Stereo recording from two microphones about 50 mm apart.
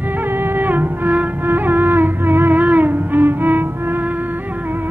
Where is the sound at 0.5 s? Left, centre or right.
Right.